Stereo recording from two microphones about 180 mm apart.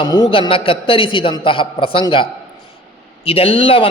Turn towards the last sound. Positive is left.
turn(degrees=30)  # may be behind; listen again after turning